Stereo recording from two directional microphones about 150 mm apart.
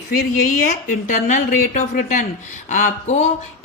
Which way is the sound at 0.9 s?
60° left (ahead or behind).